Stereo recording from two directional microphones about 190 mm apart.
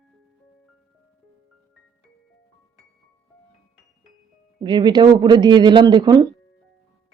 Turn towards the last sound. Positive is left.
turn(degrees=-25)  # may be behind; listen again after turning